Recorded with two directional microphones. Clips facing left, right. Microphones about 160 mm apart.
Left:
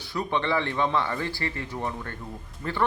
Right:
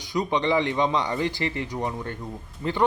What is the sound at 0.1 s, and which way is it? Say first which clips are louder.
Speech: right 3 dB; 15° right (ahead or behind).